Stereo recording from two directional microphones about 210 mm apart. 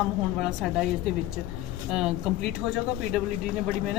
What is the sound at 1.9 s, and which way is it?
A woman's voice, centre (ahead or behind).